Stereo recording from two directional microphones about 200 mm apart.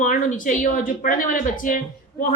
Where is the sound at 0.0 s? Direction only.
40° left (ahead or behind).